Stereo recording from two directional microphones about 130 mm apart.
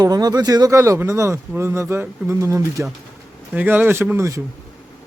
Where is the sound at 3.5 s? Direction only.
10° right (ahead or behind).